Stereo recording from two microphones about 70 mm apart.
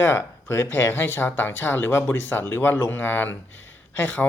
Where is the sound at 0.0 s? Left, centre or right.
Left.